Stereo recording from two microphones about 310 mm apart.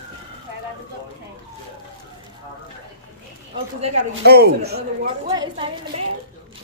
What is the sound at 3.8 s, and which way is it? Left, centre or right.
Speech, right.